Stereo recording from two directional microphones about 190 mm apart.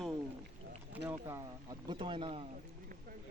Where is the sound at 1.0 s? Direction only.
15° right (ahead or behind).